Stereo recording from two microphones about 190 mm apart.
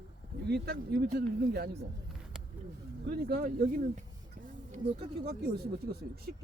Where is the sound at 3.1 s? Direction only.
55° right (ahead or behind).